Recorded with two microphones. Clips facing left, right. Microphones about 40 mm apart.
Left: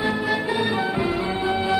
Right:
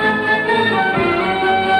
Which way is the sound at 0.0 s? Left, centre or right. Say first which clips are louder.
Right 7 dB; right.